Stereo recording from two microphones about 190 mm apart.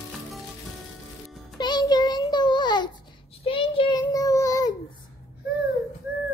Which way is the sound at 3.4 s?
30° left (ahead or behind).